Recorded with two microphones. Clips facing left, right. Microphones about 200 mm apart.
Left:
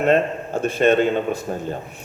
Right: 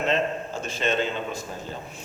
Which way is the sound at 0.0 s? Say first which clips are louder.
Left 7 dB; 60° left (ahead or behind).